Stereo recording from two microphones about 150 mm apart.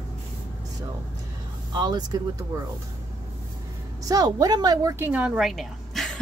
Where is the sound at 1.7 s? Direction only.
25° right (ahead or behind).